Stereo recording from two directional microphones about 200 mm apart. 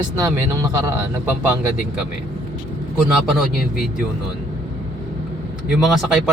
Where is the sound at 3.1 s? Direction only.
Centre (ahead or behind).